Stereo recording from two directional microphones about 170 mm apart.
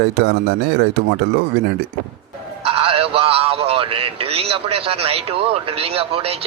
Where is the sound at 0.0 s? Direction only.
75° right (ahead or behind).